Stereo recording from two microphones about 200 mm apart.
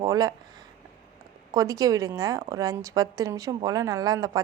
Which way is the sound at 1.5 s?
15° right (ahead or behind).